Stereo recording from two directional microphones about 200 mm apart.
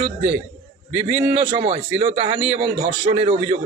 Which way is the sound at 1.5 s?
25° right (ahead or behind).